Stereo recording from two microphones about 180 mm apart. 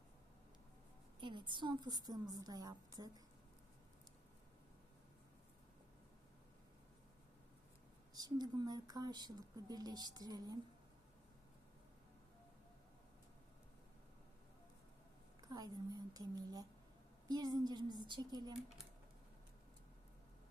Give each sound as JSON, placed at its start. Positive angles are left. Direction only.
{"t": 1.2, "sound": "speech", "side_deg": -25}
{"t": 8.1, "sound": "speech", "side_deg": -20}
{"t": 15.4, "sound": "speech", "side_deg": -20}